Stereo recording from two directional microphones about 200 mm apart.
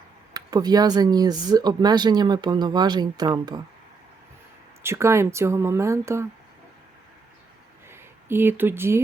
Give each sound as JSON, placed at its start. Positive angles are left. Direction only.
{"t": 0.3, "sound": "speech", "side_deg": -20}
{"t": 4.8, "sound": "speech", "side_deg": -15}
{"t": 7.9, "sound": "a sound", "side_deg": -10}